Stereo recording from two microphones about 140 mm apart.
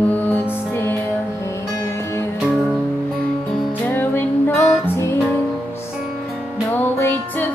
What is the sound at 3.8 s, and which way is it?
Music, 15° left (ahead or behind).